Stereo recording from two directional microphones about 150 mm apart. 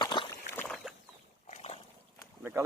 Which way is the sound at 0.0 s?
30° left (ahead or behind).